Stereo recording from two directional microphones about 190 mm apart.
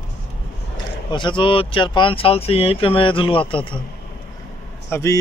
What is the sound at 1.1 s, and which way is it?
Speech, 25° left (ahead or behind).